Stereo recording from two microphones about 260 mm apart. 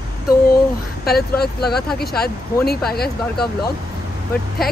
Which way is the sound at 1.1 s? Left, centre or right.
Left.